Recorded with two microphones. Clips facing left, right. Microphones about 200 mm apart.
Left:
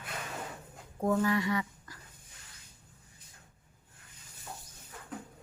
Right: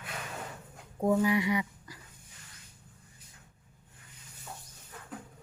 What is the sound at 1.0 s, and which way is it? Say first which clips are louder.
Speech: right 2 dB; 15° right (ahead or behind).